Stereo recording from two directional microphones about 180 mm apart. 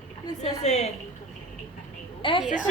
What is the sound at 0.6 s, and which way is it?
Speech, 40° left (ahead or behind).